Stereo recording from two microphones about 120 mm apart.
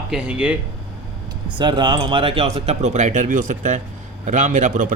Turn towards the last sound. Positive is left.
turn(degrees=-90)